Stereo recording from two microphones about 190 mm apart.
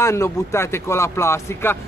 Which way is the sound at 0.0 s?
15° left (ahead or behind).